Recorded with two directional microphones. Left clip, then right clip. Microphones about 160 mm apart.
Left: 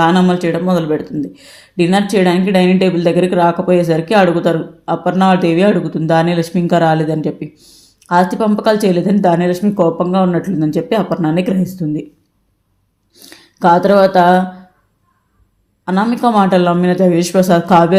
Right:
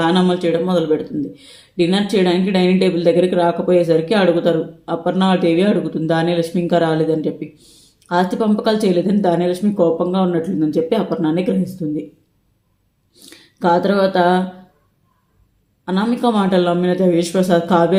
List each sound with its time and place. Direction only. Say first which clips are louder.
0.0 s speech: left 4 dB; 35° left (ahead or behind)
13.1 s speech: left 3 dB; 30° left (ahead or behind)
15.8 s speech: left 4 dB; 35° left (ahead or behind)